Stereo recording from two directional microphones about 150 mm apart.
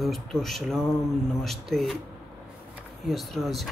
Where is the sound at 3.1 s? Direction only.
Centre (ahead or behind).